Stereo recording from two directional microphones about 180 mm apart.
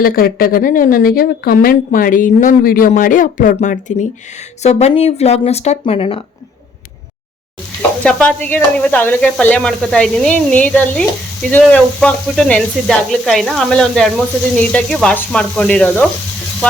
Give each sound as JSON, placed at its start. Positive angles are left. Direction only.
{"t": 0.0, "sound": "speech", "side_deg": 55}
{"t": 7.8, "sound": "sizzle", "side_deg": 5}
{"t": 11.6, "sound": "speech", "side_deg": 5}